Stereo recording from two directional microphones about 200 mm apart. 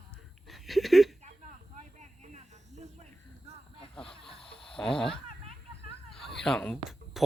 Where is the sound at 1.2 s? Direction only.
35° right (ahead or behind).